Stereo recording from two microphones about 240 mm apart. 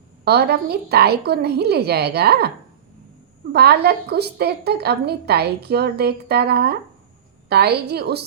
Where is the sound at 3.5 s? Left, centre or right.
Right.